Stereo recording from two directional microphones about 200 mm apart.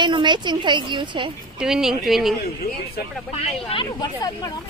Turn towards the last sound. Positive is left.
turn(degrees=20)  # may be behind; listen again after turning